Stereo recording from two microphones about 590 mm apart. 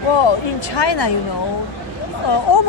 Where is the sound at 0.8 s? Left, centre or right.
Left.